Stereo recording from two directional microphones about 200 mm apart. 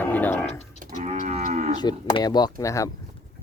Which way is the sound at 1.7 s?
20° left (ahead or behind).